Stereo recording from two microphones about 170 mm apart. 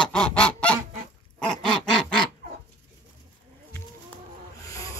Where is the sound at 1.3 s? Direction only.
5° left (ahead or behind).